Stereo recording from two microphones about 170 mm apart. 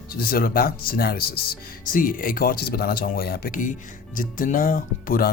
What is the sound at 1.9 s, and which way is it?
Speech, 55° left (ahead or behind).